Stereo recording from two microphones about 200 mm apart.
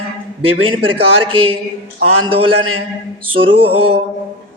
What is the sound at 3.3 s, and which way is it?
Speech, 25° right (ahead or behind).